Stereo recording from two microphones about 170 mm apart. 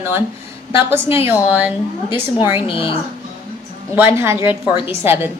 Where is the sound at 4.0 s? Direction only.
15° right (ahead or behind).